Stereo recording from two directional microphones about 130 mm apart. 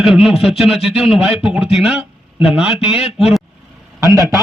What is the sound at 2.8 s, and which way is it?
Speech, 50° left (ahead or behind).